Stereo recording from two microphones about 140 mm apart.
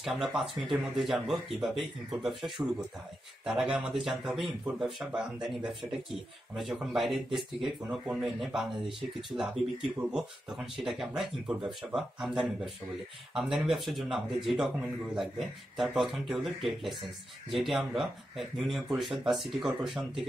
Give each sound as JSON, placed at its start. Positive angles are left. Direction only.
{"t": 0.0, "sound": "a man's voice", "side_deg": 0}
{"t": 13.7, "sound": "a man's voice", "side_deg": 0}